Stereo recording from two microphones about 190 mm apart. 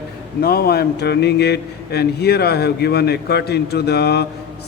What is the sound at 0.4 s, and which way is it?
A man's voice, 55° left (ahead or behind).